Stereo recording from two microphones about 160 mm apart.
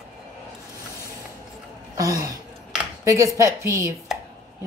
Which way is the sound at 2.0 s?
20° right (ahead or behind).